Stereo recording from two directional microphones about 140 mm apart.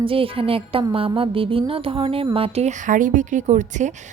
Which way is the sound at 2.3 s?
45° right (ahead or behind).